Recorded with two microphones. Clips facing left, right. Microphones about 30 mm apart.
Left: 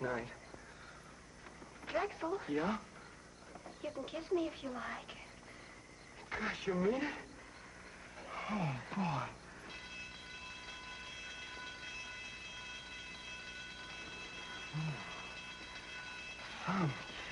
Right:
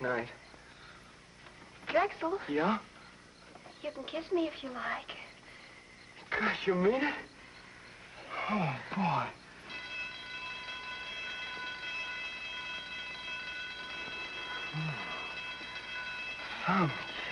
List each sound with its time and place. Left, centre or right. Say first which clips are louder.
0.0 s a woman's voice: right 5 dB; right
1.9 s a woman's voice: right 7 dB; right
3.8 s a woman's voice: right 4 dB; right
8.2 s church bell: right 6 dB; right